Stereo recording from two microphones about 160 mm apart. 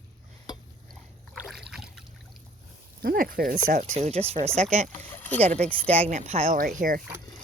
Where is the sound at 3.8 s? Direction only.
45° right (ahead or behind).